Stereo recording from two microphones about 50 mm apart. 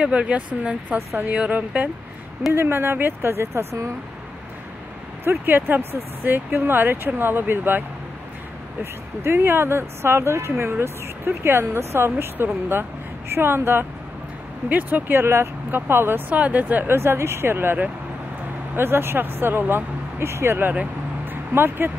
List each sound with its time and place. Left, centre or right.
0.0 s speech: right
0.9 s speech: right
1.3 s speech: right
2.5 s speech: right
5.4 s speech: right
9.2 s speech: right
10.6 s speech: right
14.7 s speech: right
15.2 s speech: right
15.7 s speech: right
16.3 s speech: right
16.8 s speech: right
18.8 s speech: right
20.8 s vehicle: right